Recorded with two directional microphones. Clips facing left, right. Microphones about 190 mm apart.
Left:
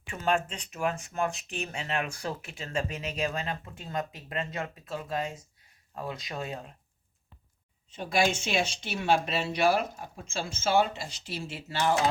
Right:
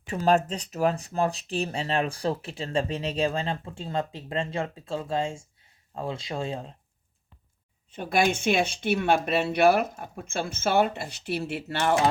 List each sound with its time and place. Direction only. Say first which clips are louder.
0.0 s speech: right 6 dB; 35° right (ahead or behind)
7.9 s speech: right 3 dB; 55° right (ahead or behind)